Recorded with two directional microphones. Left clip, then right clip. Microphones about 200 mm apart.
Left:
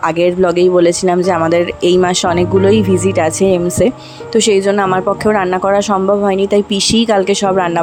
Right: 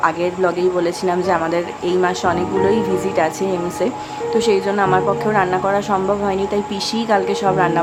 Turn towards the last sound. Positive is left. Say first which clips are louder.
# left 4 dB
turn(degrees=35)  # may be behind; listen again after turning